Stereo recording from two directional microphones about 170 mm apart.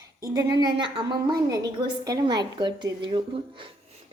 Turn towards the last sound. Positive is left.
turn(degrees=-30)  # may be behind; listen again after turning